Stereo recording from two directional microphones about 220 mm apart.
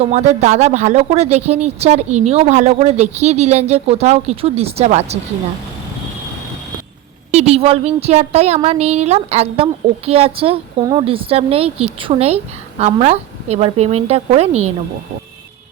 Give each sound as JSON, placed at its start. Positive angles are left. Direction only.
{"t": 0.0, "sound": "a woman's voice", "side_deg": -30}
{"t": 7.3, "sound": "a woman's voice", "side_deg": -30}